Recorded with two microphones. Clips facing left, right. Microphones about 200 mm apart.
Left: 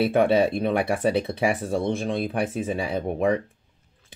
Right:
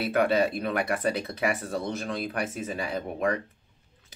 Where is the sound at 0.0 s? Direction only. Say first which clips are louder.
Left 5 dB; 30° left (ahead or behind).